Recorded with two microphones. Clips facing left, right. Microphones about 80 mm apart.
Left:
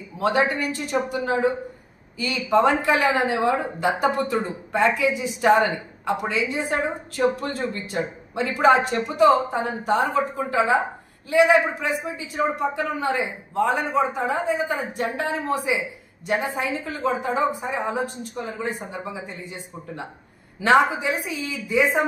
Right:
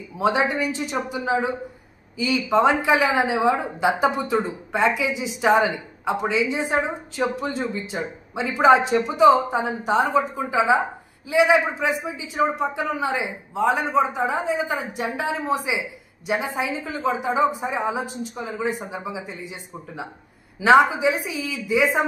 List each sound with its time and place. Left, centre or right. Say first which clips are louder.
0.2 s a woman's voice: even; centre
5.1 s speech: left 1 dB; right
5.4 s speech: even; centre
8.9 s a woman's voice: right 2 dB; centre
13.7 s a woman's voice: right 1 dB; centre